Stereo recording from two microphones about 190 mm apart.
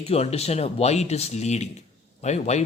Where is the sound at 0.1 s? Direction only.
35° left (ahead or behind).